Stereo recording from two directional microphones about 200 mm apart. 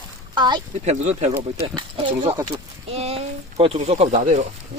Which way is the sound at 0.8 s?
35° right (ahead or behind).